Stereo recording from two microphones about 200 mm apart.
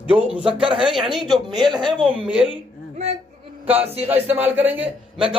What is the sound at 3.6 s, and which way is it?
A man's voice, 10° right (ahead or behind).